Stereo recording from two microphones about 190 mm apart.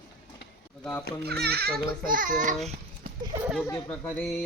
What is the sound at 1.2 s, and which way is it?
A child's voice, 55° right (ahead or behind).